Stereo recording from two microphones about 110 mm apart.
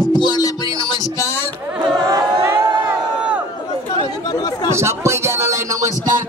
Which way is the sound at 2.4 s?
25° right (ahead or behind).